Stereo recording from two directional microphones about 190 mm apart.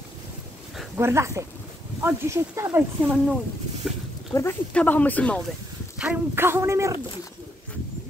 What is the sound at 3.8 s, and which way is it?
Speech, 5° right (ahead or behind).